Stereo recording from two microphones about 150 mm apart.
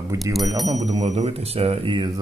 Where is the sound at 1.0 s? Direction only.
45° right (ahead or behind).